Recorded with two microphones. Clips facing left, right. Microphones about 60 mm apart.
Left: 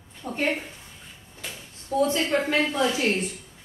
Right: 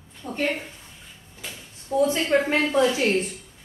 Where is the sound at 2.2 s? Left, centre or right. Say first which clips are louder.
Right 3 dB; centre.